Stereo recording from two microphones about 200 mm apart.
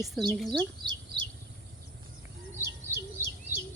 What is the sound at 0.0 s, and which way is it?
Speech, centre (ahead or behind).